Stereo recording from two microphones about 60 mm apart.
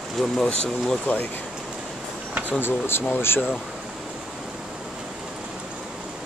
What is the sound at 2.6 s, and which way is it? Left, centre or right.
Speech, left.